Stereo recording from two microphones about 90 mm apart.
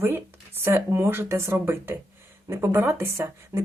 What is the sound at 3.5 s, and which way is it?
Beatboxing, 45° right (ahead or behind).